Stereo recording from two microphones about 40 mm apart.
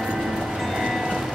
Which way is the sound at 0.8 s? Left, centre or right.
Centre.